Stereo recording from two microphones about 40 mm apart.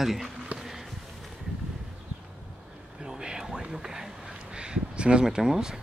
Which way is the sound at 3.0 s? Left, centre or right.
Centre.